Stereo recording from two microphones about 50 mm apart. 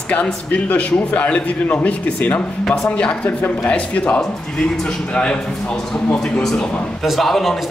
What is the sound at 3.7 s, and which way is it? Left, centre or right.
Speech, left.